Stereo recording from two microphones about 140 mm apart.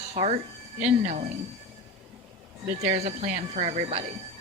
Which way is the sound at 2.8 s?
50° right (ahead or behind).